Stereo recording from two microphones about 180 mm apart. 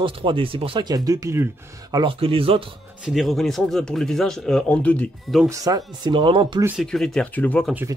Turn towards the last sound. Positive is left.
turn(degrees=10)  # may be behind; listen again after turning